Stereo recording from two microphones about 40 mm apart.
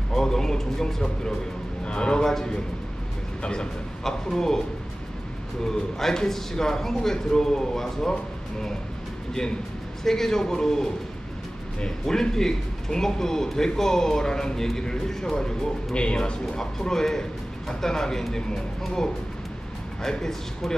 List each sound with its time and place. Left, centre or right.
0.1 s a man's voice: centre
1.9 s a man's voice: left
4.0 s a man's voice: centre
10.0 s a man's voice: centre